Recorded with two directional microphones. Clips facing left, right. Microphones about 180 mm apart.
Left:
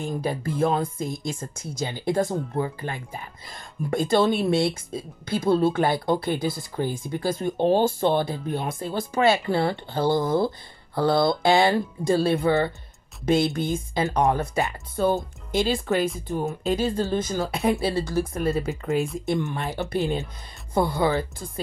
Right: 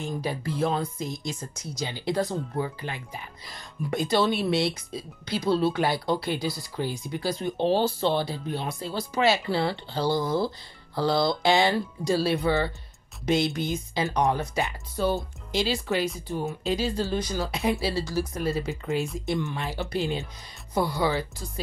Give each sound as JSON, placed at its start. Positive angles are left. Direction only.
{"t": 0.0, "sound": "speech", "side_deg": 50}